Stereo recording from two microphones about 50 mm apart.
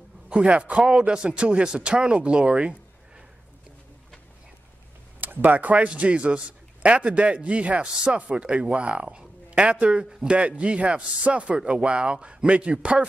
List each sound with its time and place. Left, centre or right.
0.3 s a man's voice: centre
5.2 s a man's voice: right